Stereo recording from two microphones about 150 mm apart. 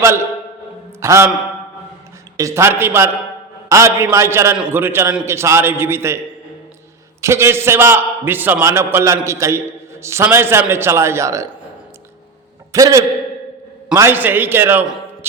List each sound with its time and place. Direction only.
1.0 s a man's voice: 20° right (ahead or behind)
2.4 s a man's voice: 15° right (ahead or behind)
7.2 s a man's voice: 15° right (ahead or behind)
12.7 s a man's voice: 20° right (ahead or behind)